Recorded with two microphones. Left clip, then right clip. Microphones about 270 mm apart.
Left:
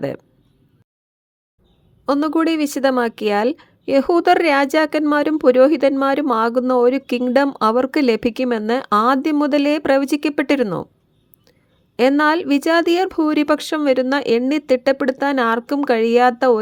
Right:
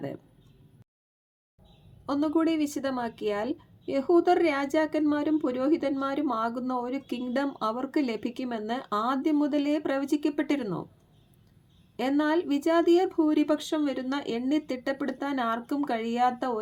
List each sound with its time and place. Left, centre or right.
2.0 s speech: left
11.9 s speech: left